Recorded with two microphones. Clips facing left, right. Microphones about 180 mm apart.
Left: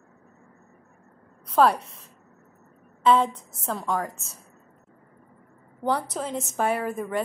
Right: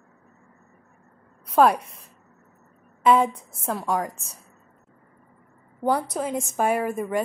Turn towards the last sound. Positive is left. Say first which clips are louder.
# right 3 dB
turn(degrees=-10)  # may be behind; listen again after turning